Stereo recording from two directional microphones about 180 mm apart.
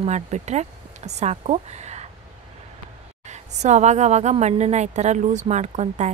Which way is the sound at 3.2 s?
40° right (ahead or behind).